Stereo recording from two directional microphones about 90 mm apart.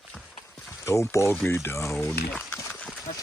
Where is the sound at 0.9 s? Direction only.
30° left (ahead or behind).